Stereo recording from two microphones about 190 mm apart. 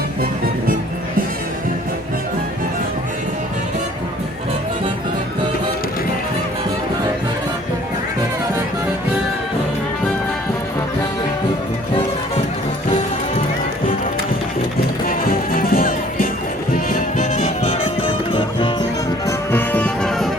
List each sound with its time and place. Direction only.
15.5 s music: 50° left (ahead or behind)
18.3 s music: 25° left (ahead or behind)
19.5 s music: 10° left (ahead or behind)